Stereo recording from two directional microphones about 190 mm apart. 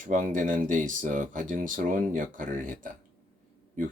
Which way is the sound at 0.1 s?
40° right (ahead or behind).